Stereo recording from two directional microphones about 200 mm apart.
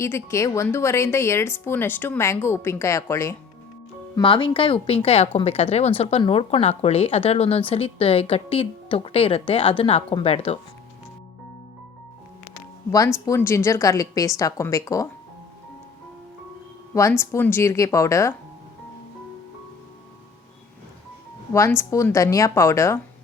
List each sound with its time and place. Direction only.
0.0 s speech: 15° left (ahead or behind); by 10.6 s 30° left (ahead or behind)
13.1 s speech: 15° left (ahead or behind)
16.9 s speech: 15° left (ahead or behind)
21.5 s speech: 15° left (ahead or behind)